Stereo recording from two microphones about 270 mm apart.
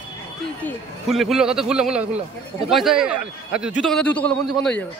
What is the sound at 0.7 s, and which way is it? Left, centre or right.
Speech, centre.